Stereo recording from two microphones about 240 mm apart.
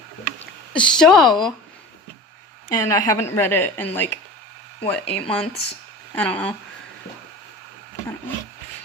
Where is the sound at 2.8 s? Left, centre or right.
Centre.